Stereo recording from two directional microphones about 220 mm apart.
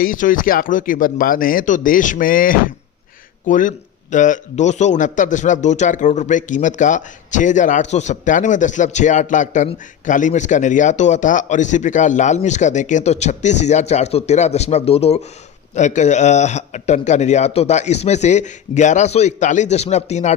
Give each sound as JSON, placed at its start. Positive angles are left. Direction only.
{"t": 0.0, "sound": "a man's voice", "side_deg": 40}